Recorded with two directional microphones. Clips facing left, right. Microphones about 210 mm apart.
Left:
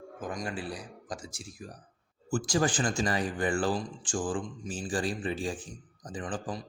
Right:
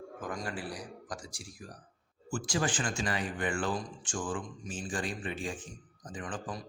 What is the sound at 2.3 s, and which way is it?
Speech, 40° left (ahead or behind).